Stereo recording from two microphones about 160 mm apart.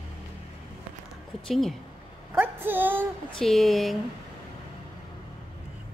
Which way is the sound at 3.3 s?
Centre (ahead or behind).